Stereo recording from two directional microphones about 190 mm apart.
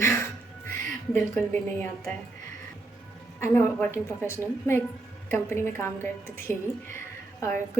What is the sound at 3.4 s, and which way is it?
A woman's voice, 15° left (ahead or behind).